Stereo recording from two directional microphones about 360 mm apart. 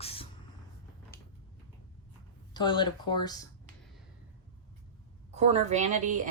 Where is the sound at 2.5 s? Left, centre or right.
Centre.